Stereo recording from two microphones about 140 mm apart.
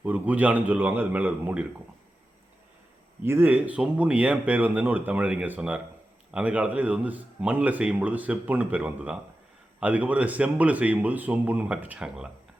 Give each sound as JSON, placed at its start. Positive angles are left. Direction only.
{"t": 0.0, "sound": "speech", "side_deg": -10}
{"t": 3.2, "sound": "speech", "side_deg": -15}